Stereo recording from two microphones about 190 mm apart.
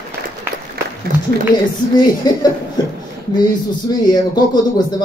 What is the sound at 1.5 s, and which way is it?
Speech, 20° left (ahead or behind).